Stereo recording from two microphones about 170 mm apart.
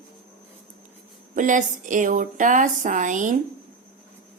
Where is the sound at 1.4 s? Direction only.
50° right (ahead or behind).